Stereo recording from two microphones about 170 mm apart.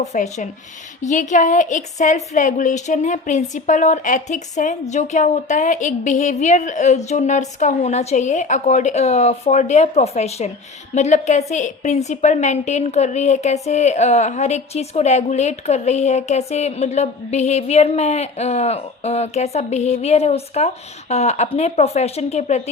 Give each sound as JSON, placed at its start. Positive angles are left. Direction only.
{"t": 0.0, "sound": "a woman's voice", "side_deg": 45}